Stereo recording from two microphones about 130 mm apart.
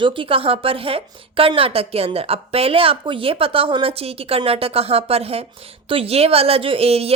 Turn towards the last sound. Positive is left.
turn(degrees=-50)  # may be behind; listen again after turning